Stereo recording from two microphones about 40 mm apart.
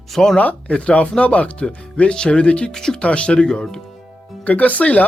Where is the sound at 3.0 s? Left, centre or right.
Left.